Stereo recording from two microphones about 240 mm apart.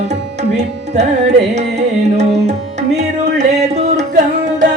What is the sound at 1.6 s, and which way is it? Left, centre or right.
Music, right.